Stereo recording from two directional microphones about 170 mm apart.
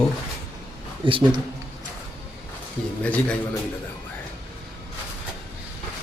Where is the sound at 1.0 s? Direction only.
30° right (ahead or behind).